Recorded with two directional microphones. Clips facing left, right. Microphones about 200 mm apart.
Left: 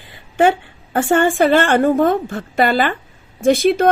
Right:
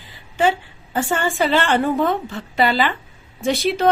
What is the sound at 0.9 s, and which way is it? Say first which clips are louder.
Speech: left 6 dB; 55° left (ahead or behind).